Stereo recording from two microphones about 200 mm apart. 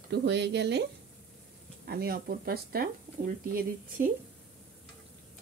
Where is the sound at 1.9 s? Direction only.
50° right (ahead or behind).